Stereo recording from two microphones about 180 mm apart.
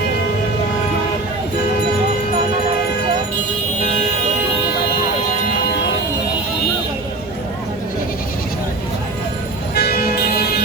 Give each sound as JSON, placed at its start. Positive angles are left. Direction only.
{"t": 9.7, "sound": "vehicle", "side_deg": 60}